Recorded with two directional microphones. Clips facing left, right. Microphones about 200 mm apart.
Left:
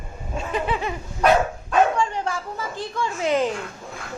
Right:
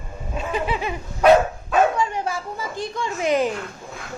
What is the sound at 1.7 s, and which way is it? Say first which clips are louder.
Bow-wow: even; 5° right (ahead or behind).